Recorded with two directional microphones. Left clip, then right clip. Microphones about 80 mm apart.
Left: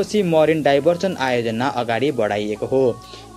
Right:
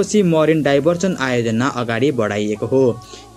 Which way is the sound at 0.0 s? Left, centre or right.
Left.